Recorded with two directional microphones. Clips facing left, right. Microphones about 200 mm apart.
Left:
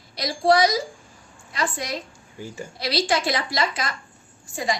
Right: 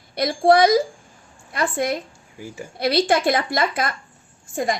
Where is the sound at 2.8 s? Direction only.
55° right (ahead or behind).